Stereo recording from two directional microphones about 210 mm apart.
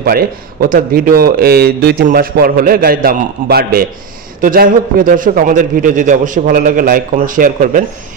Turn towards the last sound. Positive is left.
turn(degrees=-40)  # may be behind; listen again after turning